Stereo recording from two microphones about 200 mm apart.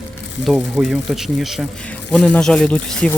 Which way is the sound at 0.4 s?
Centre (ahead or behind).